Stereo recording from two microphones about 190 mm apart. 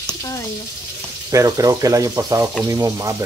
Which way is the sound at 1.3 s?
15° right (ahead or behind).